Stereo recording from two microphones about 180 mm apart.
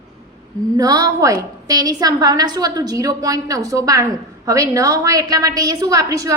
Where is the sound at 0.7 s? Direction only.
20° right (ahead or behind).